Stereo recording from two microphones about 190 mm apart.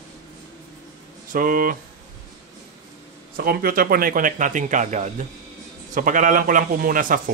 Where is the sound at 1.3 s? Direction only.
45° right (ahead or behind).